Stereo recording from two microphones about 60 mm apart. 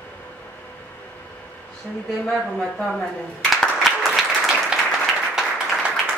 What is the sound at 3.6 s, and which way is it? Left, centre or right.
Applause, centre.